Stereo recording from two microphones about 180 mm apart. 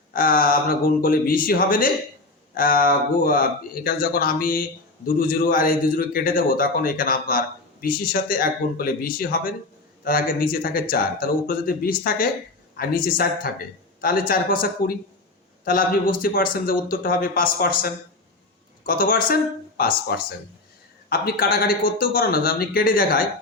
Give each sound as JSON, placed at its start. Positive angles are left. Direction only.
{"t": 0.1, "sound": "a man's voice", "side_deg": 50}